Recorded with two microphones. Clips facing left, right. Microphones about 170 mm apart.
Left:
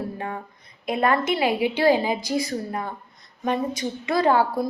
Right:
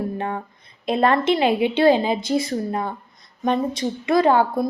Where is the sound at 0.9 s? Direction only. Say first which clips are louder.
Right 4 dB; 30° right (ahead or behind).